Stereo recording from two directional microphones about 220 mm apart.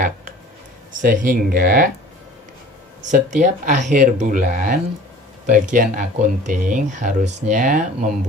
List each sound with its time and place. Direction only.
0.9 s speech: 35° right (ahead or behind)
3.1 s speech: 35° right (ahead or behind)